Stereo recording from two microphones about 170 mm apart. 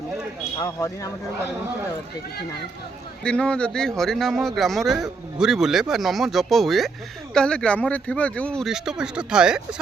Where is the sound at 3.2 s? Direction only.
5° left (ahead or behind).